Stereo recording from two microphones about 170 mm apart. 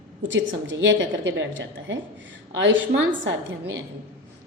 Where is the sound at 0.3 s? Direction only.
90° right.